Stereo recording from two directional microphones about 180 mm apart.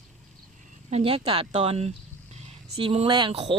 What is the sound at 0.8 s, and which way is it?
Speech, 35° right (ahead or behind).